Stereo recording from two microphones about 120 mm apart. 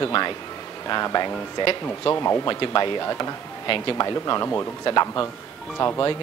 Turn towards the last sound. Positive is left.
turn(degrees=30)  # may be behind; listen again after turning